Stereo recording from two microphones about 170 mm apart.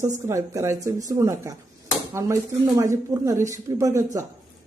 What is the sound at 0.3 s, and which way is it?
Speech, 15° right (ahead or behind).